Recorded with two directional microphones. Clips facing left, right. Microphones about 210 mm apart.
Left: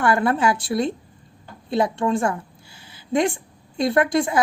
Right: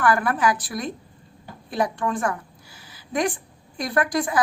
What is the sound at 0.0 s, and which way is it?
A woman's voice, 25° left (ahead or behind).